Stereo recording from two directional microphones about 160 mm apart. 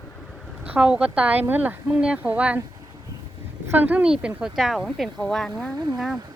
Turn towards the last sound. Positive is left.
turn(degrees=0)  # may be behind; listen again after turning